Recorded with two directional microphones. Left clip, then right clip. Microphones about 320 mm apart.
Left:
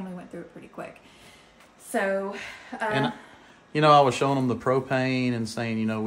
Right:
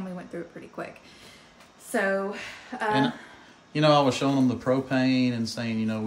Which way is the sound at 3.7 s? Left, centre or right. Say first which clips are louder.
Left 3 dB; centre.